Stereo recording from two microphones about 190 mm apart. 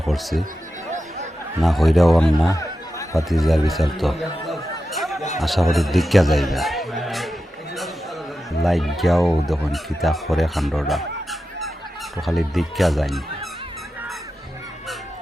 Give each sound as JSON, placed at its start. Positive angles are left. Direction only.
{"t": 0.0, "sound": "speech", "side_deg": 0}
{"t": 0.9, "sound": "chatter", "side_deg": -40}
{"t": 1.6, "sound": "speech", "side_deg": 0}
{"t": 2.5, "sound": "a sound", "side_deg": 15}
{"t": 3.2, "sound": "chatter", "side_deg": 0}
{"t": 5.4, "sound": "speech", "side_deg": 0}
{"t": 8.6, "sound": "speech", "side_deg": 0}